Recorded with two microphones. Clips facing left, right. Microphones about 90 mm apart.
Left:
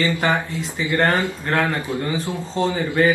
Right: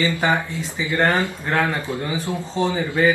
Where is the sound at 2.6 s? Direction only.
20° right (ahead or behind).